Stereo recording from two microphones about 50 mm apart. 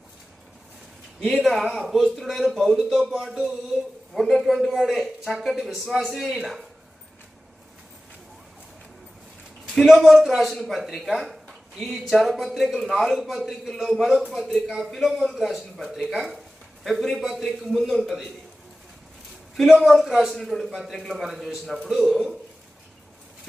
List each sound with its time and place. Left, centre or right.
1.4 s a man's voice: centre
1.8 s a sound: centre
2.1 s a man's voice: centre
3.1 s a sound: centre
4.1 s a man's voice: centre
9.7 s a man's voice: centre
19.8 s a man's voice: centre